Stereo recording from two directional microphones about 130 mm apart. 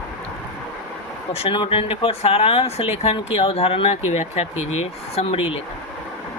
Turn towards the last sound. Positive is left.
turn(degrees=45)  # may be behind; listen again after turning